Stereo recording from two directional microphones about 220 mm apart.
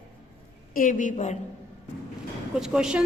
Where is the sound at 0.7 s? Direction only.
35° left (ahead or behind).